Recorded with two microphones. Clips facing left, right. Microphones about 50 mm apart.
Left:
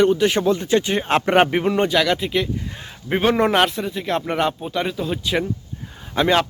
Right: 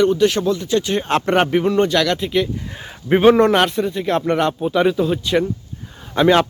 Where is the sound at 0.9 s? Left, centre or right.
Centre.